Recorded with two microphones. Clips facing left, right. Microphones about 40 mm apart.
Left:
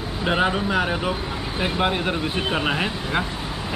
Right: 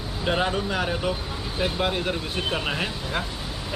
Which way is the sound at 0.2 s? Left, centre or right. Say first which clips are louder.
Left 3 dB; centre.